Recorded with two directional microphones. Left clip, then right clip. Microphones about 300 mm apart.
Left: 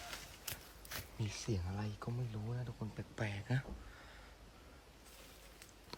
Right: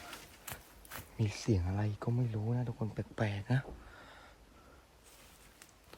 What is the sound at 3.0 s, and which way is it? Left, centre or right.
Speech, centre.